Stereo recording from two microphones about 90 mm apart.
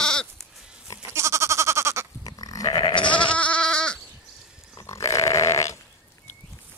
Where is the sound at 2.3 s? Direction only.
40° left (ahead or behind); by 3.3 s 65° left (ahead or behind).